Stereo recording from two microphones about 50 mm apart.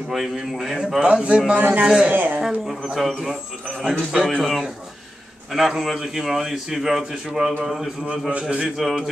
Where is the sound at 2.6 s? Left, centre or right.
Centre.